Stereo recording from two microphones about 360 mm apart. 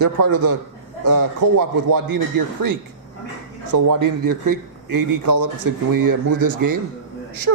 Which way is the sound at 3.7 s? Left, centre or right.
Right.